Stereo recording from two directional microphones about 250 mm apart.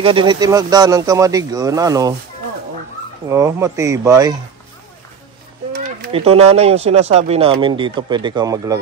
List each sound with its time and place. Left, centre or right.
0.0 s speech: centre
3.3 s speech: centre
5.7 s a sound: right
6.1 s speech: right